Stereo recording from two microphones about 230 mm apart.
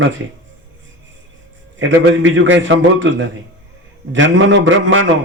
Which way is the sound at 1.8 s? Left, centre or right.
Right.